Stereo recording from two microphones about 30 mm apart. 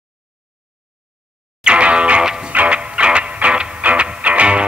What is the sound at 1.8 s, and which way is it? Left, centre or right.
Music, right.